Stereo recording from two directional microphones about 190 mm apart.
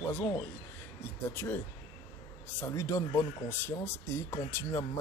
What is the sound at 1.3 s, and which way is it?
Speech, 10° left (ahead or behind).